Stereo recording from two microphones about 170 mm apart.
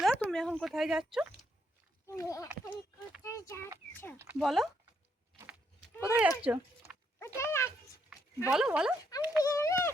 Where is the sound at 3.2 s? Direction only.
15° left (ahead or behind).